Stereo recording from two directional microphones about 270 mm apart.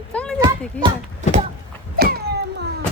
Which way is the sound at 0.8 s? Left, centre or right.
Right.